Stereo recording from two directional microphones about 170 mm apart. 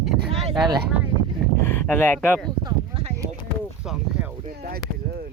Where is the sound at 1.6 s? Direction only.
10° left (ahead or behind).